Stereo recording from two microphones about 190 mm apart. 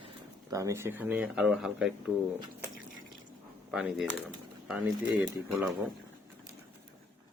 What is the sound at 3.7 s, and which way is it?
Speech, 5° right (ahead or behind).